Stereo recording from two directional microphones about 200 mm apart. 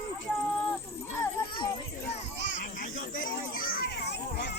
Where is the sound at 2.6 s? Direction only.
40° left (ahead or behind).